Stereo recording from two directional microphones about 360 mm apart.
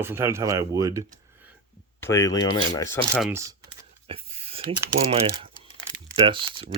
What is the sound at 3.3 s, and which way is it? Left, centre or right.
Speech, centre.